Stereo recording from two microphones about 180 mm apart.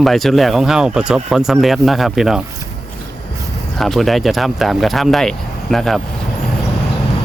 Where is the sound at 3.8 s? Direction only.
Centre (ahead or behind).